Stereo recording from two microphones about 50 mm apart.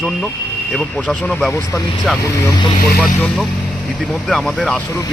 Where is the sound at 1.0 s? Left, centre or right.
Left.